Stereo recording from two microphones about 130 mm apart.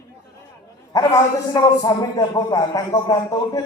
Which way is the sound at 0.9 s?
30° left (ahead or behind).